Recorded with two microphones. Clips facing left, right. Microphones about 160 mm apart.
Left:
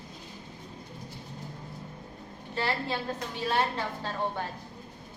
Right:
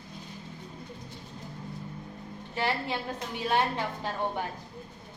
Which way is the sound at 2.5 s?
15° right (ahead or behind).